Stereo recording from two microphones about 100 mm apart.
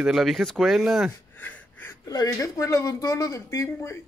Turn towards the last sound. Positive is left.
turn(degrees=25)  # may be behind; listen again after turning